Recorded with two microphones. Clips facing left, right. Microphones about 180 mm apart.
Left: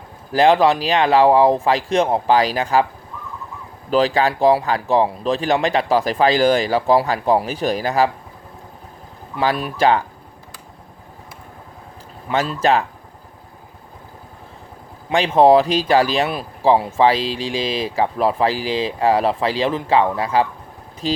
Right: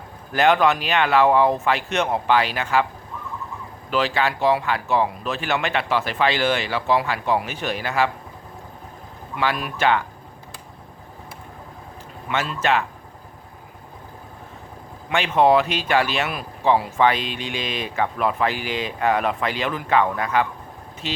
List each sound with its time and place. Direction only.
0.3 s speech: 30° left (ahead or behind)
3.8 s speech: 40° left (ahead or behind)
9.3 s speech: 35° left (ahead or behind)
12.3 s speech: 35° left (ahead or behind)
15.1 s speech: 35° left (ahead or behind)